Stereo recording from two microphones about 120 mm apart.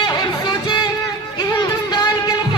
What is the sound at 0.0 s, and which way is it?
Music, 40° left (ahead or behind).